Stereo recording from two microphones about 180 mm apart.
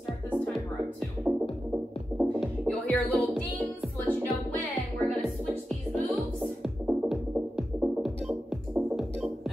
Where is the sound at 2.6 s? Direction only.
10° left (ahead or behind).